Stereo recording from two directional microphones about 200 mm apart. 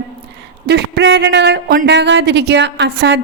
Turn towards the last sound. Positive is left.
turn(degrees=-55)  # may be behind; listen again after turning